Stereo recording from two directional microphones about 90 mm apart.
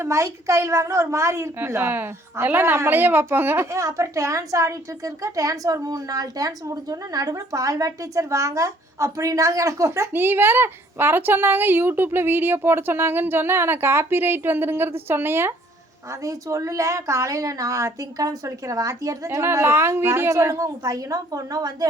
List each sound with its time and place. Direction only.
0.0 s a woman's voice: 35° right (ahead or behind)
3.7 s a woman's voice: 35° right (ahead or behind)
10.1 s a woman's voice: 25° right (ahead or behind); by 21.8 s 45° right (ahead or behind)